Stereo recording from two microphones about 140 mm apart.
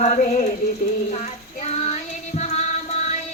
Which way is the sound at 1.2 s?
55° left (ahead or behind).